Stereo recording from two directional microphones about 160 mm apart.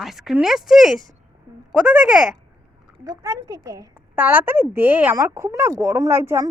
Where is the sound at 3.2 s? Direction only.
20° right (ahead or behind).